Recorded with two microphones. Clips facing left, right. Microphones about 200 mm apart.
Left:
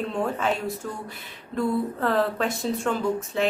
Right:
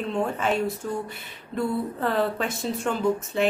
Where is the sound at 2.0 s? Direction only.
Centre (ahead or behind).